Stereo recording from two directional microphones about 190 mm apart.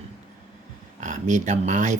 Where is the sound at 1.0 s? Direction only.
40° right (ahead or behind).